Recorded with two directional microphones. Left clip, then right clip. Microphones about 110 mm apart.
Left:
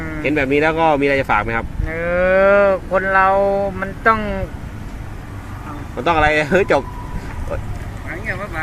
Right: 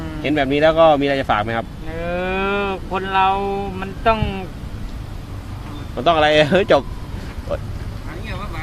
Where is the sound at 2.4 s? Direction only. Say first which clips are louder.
Left 9 dB; 20° right (ahead or behind).